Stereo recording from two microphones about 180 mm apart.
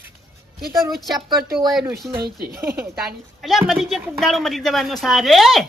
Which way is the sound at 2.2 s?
55° right (ahead or behind).